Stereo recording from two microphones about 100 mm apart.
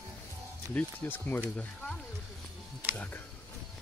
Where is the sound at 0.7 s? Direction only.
15° left (ahead or behind).